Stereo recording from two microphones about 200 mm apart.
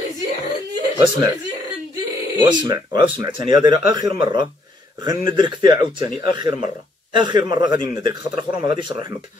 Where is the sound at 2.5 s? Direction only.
20° right (ahead or behind).